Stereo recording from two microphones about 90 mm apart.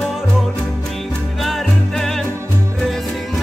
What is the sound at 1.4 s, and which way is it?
Music, centre (ahead or behind).